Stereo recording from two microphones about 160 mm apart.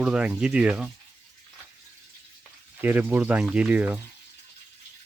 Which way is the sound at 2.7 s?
10° right (ahead or behind).